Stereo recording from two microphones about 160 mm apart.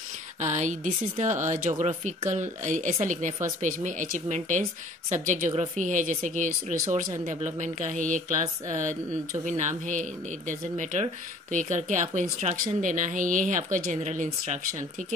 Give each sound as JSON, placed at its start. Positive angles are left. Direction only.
{"t": 0.4, "sound": "speech", "side_deg": -45}